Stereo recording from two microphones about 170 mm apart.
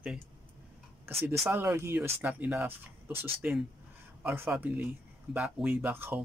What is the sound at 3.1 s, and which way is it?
Speech, 35° right (ahead or behind).